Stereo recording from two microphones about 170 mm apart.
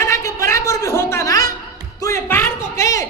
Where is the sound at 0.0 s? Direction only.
20° left (ahead or behind).